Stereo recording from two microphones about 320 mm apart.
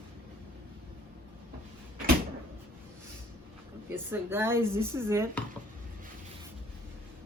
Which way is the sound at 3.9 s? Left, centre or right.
Centre.